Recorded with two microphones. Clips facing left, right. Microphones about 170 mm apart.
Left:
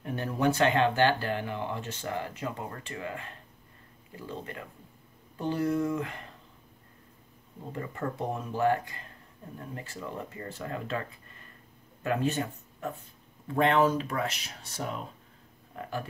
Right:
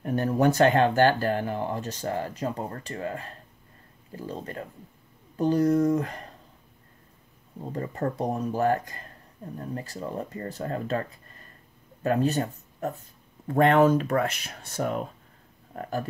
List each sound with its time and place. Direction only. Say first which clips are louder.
0.0 s speech: right 5 dB; 45° right (ahead or behind)
7.7 s speech: right 5 dB; 35° right (ahead or behind)
13.5 s speech: right 5 dB; 50° right (ahead or behind)
15.7 s a sound: right 4 dB; 45° right (ahead or behind)